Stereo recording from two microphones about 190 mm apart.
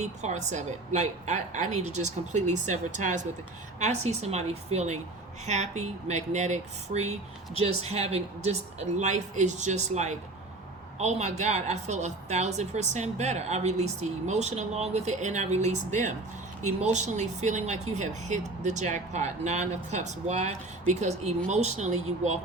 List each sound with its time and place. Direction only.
0.0 s speech: 35° right (ahead or behind)